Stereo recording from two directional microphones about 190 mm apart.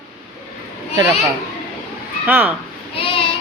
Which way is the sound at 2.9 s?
30° left (ahead or behind).